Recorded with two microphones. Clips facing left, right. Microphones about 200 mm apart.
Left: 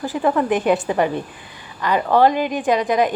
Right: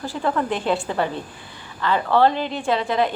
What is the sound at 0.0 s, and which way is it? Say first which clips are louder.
A woman's voice: left 4 dB; 15° left (ahead or behind).